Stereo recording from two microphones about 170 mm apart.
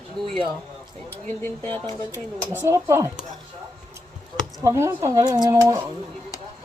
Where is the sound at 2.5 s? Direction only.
15° right (ahead or behind).